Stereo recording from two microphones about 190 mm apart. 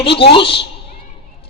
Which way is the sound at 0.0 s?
30° left (ahead or behind).